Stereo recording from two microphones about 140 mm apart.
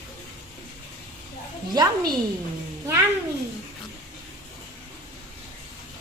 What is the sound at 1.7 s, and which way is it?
Speech, 30° right (ahead or behind).